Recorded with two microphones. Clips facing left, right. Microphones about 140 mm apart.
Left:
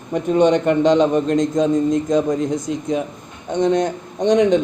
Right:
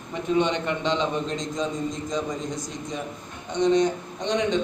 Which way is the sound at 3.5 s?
50° left (ahead or behind).